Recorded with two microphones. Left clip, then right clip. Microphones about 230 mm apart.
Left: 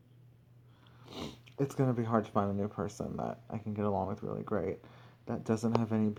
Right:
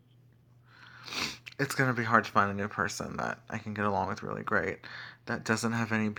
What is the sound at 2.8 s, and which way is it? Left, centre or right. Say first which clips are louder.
Speech: right 7 dB; centre.